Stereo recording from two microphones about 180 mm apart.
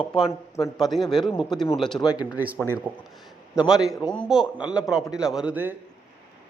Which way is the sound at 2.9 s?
10° right (ahead or behind).